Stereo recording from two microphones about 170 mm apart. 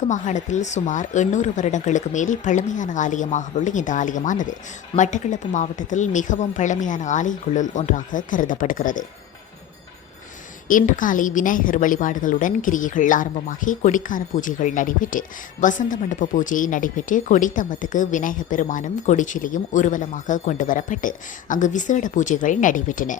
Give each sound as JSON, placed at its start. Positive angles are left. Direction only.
{"t": 0.1, "sound": "speech", "side_deg": 45}
{"t": 10.7, "sound": "speech", "side_deg": 50}